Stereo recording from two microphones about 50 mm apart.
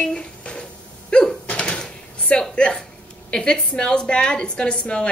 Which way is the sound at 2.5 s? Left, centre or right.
Centre.